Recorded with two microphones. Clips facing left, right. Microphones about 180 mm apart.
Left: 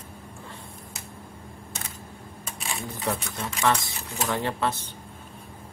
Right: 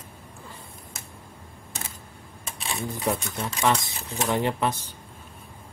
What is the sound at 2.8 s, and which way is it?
Speech, 15° right (ahead or behind).